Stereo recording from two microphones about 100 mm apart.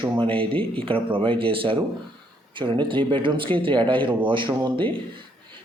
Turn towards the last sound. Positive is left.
turn(degrees=-55)  # may be behind; listen again after turning